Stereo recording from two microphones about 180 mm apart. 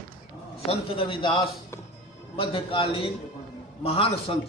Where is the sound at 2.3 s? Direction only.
30° left (ahead or behind).